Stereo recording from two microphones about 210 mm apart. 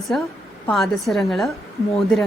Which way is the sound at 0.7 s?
Centre (ahead or behind).